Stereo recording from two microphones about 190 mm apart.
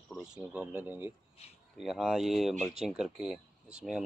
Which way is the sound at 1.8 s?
Centre (ahead or behind).